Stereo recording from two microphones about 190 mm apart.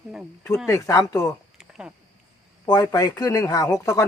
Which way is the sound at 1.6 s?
5° right (ahead or behind).